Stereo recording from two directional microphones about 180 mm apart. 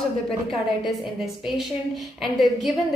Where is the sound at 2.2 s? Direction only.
Centre (ahead or behind).